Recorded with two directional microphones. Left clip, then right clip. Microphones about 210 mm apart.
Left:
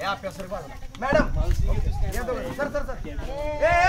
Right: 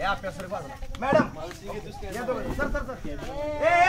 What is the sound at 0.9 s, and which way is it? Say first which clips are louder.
Speech: even; 30° left (ahead or behind).